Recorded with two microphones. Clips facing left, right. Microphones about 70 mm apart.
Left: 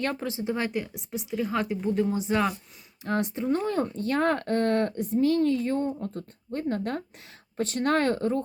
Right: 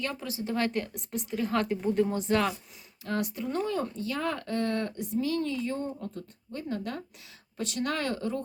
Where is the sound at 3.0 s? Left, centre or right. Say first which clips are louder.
Left 5 dB; left.